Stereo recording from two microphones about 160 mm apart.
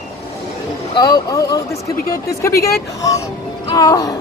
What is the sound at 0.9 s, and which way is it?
Speech, 25° left (ahead or behind).